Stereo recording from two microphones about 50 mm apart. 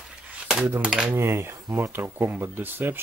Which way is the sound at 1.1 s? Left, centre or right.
Right.